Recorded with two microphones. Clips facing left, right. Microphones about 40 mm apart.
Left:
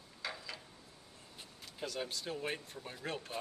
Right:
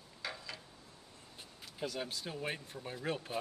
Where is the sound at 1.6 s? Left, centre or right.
Centre.